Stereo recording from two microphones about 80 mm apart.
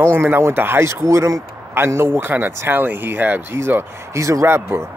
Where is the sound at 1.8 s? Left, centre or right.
Right.